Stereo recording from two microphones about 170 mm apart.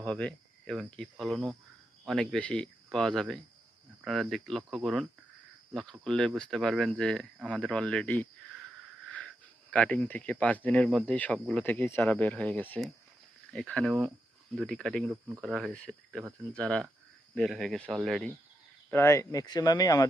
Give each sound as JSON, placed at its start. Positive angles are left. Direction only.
{"t": 0.0, "sound": "speech", "side_deg": 5}
{"t": 18.9, "sound": "speech", "side_deg": 15}